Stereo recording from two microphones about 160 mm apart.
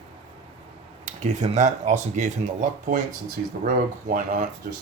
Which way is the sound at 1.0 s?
50° right (ahead or behind).